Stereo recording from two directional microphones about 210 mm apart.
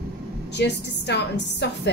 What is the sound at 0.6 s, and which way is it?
A woman's voice, 55° left (ahead or behind).